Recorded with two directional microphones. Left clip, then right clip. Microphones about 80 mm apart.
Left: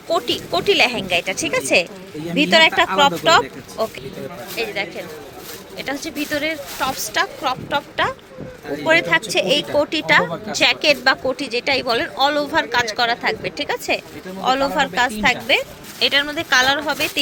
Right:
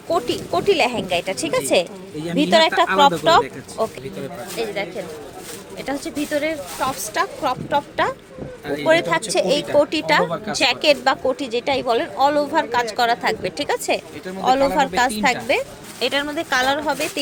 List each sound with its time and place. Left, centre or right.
0.1 s a woman's voice: centre
8.7 s a woman's voice: right
13.0 s a woman's voice: right
13.4 s a woman's voice: right
14.4 s speech: right